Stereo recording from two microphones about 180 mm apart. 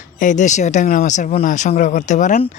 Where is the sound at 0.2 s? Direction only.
45° left (ahead or behind).